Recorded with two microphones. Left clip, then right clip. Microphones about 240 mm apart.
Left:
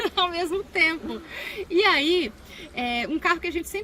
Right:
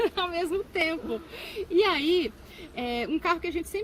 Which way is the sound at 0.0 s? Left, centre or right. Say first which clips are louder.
Left 3 dB; centre.